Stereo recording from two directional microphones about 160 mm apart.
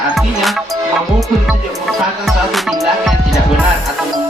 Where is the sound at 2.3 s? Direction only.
Centre (ahead or behind).